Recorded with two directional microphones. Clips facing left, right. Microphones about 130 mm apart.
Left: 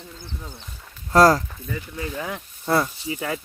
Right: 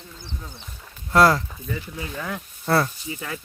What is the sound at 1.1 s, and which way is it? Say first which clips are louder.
Speech: left 2 dB; 40° left (ahead or behind).